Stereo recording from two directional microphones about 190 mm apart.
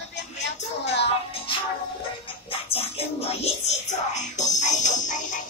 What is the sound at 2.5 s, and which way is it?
Music, 30° left (ahead or behind).